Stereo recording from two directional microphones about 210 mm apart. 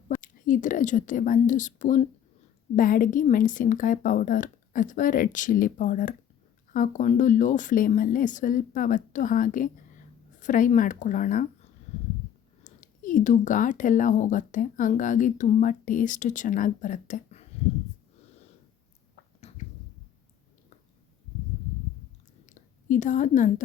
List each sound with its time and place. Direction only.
0.2 s speech: 40° left (ahead or behind)
12.6 s speech: 40° left (ahead or behind)
22.4 s a woman's voice: 35° left (ahead or behind)